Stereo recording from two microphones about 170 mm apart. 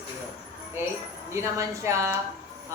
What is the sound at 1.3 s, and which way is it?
Speech, 15° right (ahead or behind).